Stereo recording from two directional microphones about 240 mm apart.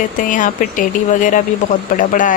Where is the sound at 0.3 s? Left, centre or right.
Left.